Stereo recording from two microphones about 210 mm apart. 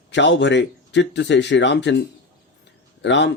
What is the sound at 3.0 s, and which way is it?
Speech, 55° left (ahead or behind).